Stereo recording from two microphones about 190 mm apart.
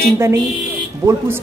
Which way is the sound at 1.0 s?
15° right (ahead or behind).